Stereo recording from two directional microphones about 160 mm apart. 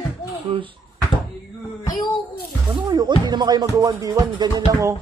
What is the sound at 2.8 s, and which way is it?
Music, 25° right (ahead or behind).